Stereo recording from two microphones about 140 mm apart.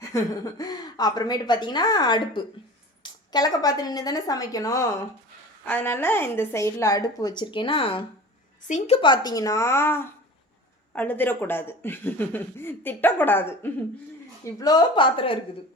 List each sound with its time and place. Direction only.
0.6 s a woman's voice: 30° left (ahead or behind)
14.4 s a woman's voice: 25° left (ahead or behind)